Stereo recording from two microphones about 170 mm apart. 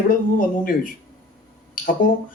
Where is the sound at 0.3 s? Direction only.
55° left (ahead or behind).